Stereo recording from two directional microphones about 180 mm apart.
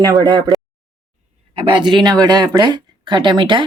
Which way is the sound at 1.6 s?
25° right (ahead or behind).